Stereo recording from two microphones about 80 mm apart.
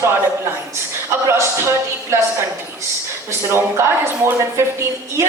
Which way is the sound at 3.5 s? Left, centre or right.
Right.